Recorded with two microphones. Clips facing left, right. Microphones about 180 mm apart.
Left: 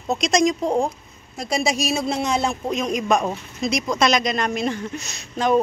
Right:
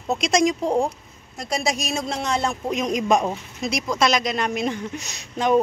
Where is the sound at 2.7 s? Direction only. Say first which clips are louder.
Right 1 dB; 20° right (ahead or behind).